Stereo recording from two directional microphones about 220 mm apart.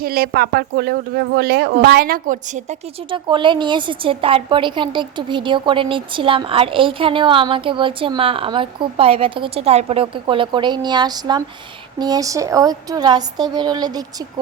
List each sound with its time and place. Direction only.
0.0 s a woman's voice: 45° right (ahead or behind)
3.1 s a woman's voice: 20° right (ahead or behind)